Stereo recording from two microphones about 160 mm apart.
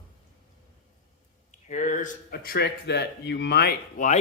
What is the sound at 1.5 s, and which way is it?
Speech, 50° left (ahead or behind).